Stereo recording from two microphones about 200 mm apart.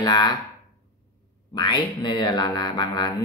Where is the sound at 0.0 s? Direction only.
20° left (ahead or behind).